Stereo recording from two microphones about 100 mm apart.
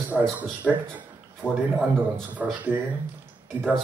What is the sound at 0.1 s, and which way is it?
Speech, 15° right (ahead or behind).